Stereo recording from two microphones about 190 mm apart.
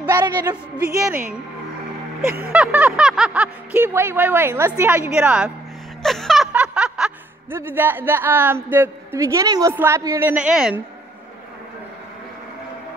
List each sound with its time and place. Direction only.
0.2 s a woman's voice: 20° right (ahead or behind)
0.7 s a man's voice: 10° right (ahead or behind)
2.5 s a man's voice: 5° right (ahead or behind)
6.0 s snicker: centre (ahead or behind)
7.5 s a man's voice: 10° right (ahead or behind)